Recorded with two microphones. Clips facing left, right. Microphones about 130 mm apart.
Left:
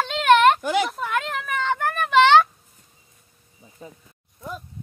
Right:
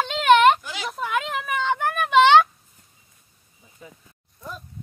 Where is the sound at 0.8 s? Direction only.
Centre (ahead or behind).